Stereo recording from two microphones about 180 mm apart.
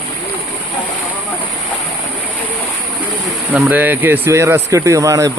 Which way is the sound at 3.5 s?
10° right (ahead or behind).